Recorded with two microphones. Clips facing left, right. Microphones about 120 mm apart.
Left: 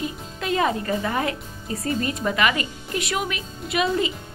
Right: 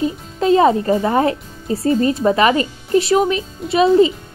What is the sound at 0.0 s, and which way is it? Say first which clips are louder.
A child's voice: right 11 dB; 30° right (ahead or behind).